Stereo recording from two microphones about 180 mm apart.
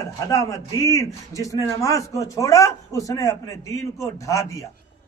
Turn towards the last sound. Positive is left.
turn(degrees=15)  # may be behind; listen again after turning